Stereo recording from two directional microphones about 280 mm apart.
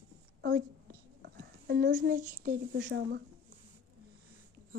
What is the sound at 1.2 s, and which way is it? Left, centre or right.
A child's voice, right.